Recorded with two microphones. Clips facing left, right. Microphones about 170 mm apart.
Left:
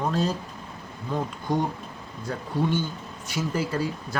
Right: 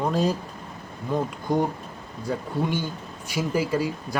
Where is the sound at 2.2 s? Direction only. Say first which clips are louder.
Even; 10° right (ahead or behind).